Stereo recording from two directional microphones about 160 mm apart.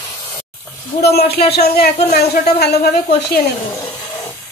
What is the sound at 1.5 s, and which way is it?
Speech, 80° left.